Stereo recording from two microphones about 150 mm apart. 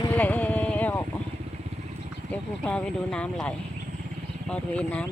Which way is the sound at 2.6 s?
5° left (ahead or behind).